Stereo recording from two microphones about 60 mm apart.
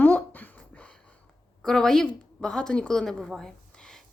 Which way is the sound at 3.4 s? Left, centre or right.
Centre.